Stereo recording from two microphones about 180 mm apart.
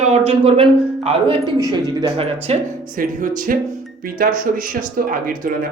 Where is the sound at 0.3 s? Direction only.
35° right (ahead or behind).